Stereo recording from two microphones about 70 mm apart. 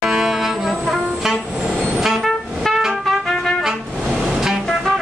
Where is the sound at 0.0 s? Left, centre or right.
Centre.